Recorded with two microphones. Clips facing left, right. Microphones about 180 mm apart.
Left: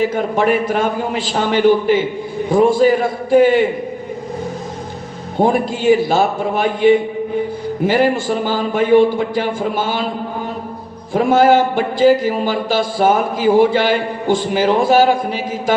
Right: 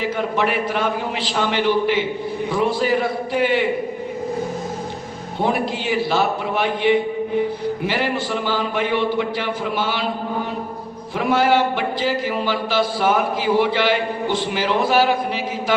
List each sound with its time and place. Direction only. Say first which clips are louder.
0.0 s a man's voice: left 5 dB; 45° left (ahead or behind)
5.4 s a man's voice: left 6 dB; 45° left (ahead or behind)
11.1 s a man's voice: left 6 dB; 45° left (ahead or behind)